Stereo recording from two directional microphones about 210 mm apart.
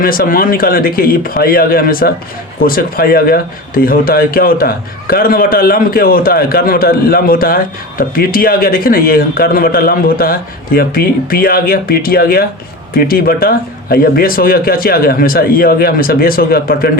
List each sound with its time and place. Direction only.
0.0 s speech: 45° left (ahead or behind)